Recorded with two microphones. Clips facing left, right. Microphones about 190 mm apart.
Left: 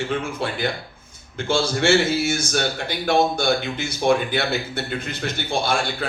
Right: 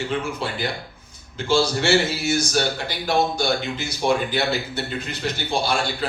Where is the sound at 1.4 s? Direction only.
55° left (ahead or behind).